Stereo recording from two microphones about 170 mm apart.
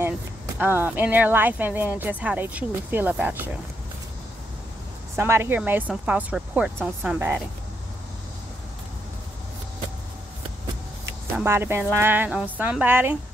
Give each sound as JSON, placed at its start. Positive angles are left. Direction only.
{"t": 0.6, "sound": "speech", "side_deg": -10}
{"t": 5.1, "sound": "speech", "side_deg": -15}
{"t": 11.3, "sound": "speech", "side_deg": -15}